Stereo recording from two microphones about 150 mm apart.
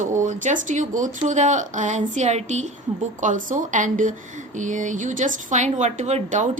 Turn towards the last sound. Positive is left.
turn(degrees=-55)  # may be behind; listen again after turning